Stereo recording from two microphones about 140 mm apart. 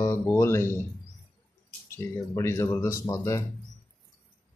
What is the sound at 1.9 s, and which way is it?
Speech, 20° left (ahead or behind).